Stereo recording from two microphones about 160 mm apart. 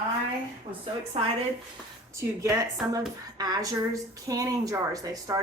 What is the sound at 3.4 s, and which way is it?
Speech, 25° right (ahead or behind).